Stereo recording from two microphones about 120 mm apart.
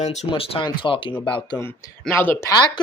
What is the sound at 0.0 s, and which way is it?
Speech, 70° left (ahead or behind).